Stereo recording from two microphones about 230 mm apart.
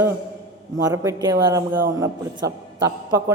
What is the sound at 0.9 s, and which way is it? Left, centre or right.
A woman's voice, centre.